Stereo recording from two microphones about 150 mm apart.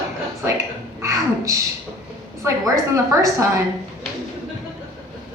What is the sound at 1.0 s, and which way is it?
Speech, 20° right (ahead or behind).